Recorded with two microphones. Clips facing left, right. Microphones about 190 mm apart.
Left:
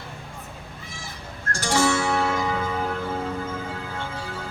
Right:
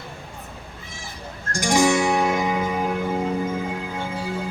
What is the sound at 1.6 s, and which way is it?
Music, 15° right (ahead or behind).